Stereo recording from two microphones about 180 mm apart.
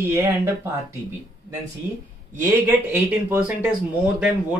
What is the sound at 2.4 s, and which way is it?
Speech, 10° right (ahead or behind).